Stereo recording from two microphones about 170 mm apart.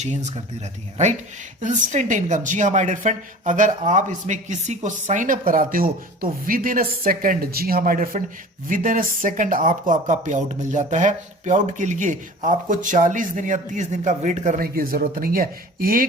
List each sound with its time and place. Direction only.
0.0 s a woman's voice: 40° right (ahead or behind)
1.6 s a woman's voice: 45° right (ahead or behind)
14.6 s speech: 60° right (ahead or behind)